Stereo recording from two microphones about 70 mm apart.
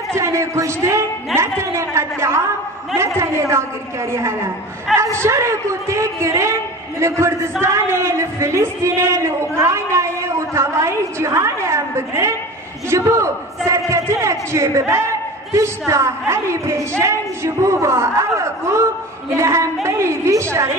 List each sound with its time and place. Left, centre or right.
0.1 s a woman's voice: right
4.9 s a man's voice: centre
5.2 s a woman's voice: right